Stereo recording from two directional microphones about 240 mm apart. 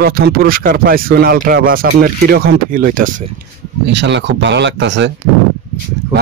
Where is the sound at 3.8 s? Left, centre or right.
Right.